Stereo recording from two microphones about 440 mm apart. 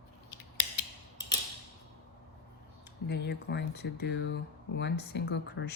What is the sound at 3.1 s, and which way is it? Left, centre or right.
Speech, left.